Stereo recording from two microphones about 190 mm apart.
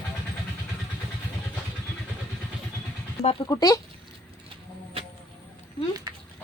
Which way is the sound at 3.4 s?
20° left (ahead or behind).